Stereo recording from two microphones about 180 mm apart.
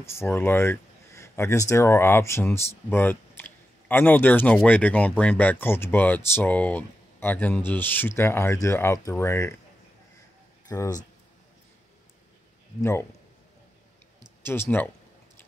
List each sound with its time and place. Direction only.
0.0 s speech: 15° left (ahead or behind)
10.7 s speech: 20° left (ahead or behind)
14.4 s speech: 10° left (ahead or behind)